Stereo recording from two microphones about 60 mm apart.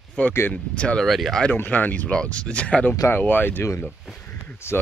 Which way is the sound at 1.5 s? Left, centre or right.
Left.